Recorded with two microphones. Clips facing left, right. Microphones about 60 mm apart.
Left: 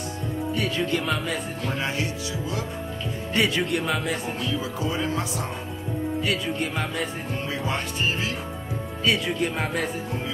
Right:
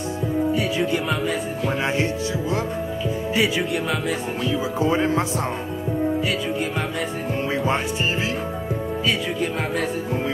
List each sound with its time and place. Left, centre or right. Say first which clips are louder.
0.5 s music: even; centre
3.3 s music: even; centre
4.7 s speech: right 9 dB; right
9.0 s music: left 2 dB; centre